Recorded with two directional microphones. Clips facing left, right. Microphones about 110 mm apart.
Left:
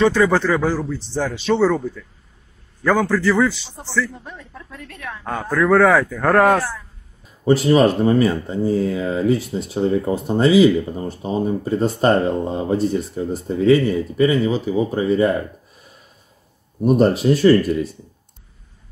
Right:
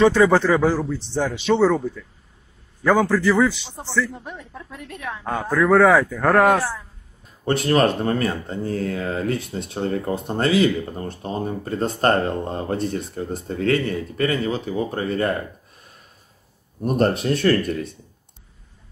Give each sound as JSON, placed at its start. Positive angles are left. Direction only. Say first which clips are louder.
{"t": 0.0, "sound": "speech", "louder": "right 1 dB", "side_deg": -25}
{"t": 3.0, "sound": "a man's voice", "louder": "left 1 dB", "side_deg": -15}
{"t": 7.4, "sound": "speech", "louder": "left 4 dB", "side_deg": 5}
{"t": 16.8, "sound": "speech", "louder": "left 5 dB", "side_deg": 0}